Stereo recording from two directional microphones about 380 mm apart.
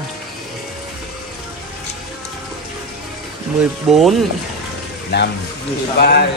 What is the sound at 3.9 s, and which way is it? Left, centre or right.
Speech, centre.